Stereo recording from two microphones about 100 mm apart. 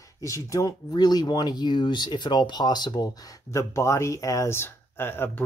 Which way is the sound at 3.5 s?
30° left (ahead or behind).